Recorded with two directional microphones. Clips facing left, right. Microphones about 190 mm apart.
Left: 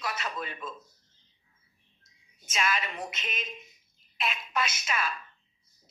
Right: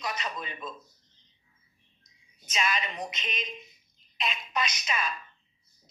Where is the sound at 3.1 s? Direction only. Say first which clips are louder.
Right 1 dB; 5° left (ahead or behind).